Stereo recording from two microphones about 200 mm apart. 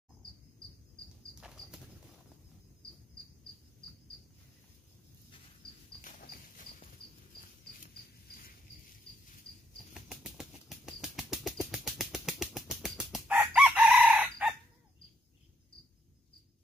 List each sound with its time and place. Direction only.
1.4 s horse: 5° right (ahead or behind)
5.9 s a sound: 45° left (ahead or behind)
9.9 s bird flight: 5° right (ahead or behind)